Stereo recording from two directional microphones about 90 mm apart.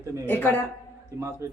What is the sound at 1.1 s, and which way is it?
Speech, 30° right (ahead or behind).